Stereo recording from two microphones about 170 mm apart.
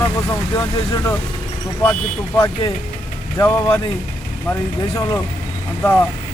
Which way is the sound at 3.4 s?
15° left (ahead or behind).